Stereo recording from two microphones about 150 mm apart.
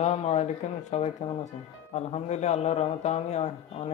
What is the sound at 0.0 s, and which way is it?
A man's voice, 45° left (ahead or behind).